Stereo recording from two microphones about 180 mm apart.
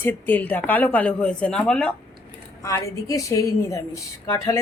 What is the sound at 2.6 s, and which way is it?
A woman's voice, 15° left (ahead or behind).